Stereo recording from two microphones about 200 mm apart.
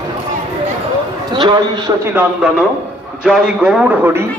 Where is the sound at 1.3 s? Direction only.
25° right (ahead or behind).